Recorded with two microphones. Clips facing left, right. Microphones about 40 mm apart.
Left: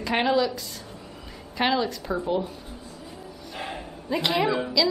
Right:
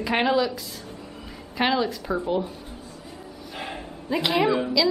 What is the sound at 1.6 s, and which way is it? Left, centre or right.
Speech, centre.